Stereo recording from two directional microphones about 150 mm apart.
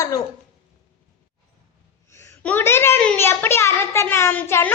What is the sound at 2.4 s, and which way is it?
A child's voice, 15° left (ahead or behind).